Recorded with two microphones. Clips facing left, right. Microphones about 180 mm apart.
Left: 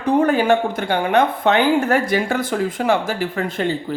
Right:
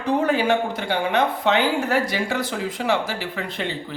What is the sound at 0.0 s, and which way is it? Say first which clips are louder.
Speech: left 4 dB; 50° left (ahead or behind).